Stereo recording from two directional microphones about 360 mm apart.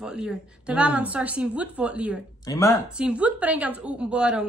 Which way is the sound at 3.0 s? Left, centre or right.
Centre.